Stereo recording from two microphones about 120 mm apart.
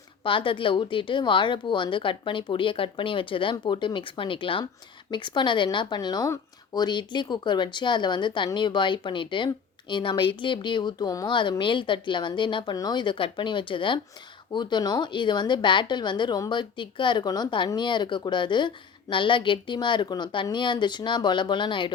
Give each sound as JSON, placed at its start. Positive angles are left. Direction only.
{"t": 0.3, "sound": "a woman's voice", "side_deg": 45}